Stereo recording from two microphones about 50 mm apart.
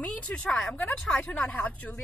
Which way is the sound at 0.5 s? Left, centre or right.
Centre.